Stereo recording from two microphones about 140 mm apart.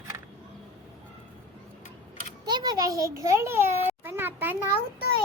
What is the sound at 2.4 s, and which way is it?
A child's voice, 30° right (ahead or behind).